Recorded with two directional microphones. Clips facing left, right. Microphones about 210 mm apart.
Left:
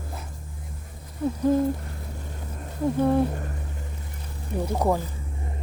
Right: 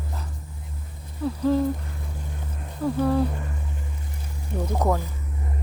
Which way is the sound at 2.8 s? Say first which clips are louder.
Left 1 dB; 25° left (ahead or behind).